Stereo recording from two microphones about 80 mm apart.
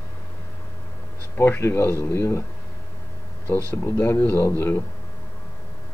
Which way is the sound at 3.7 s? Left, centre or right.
Left.